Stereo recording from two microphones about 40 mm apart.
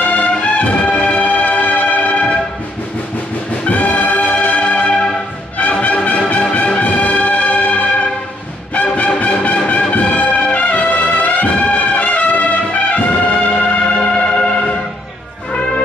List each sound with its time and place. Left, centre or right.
0.0 s music: left
3.6 s brass instrument: left
5.6 s music: left
6.5 s brass instrument: left
8.7 s music: left
11.6 s brass instrument: left
13.6 s music: left